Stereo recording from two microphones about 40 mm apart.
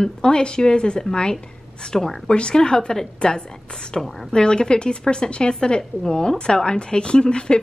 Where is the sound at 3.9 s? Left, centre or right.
Centre.